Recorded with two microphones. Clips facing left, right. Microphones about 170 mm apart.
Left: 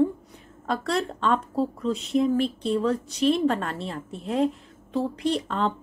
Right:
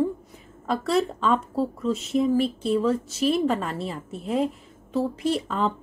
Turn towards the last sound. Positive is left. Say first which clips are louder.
# right 1 dB
turn(degrees=-5)  # may be behind; listen again after turning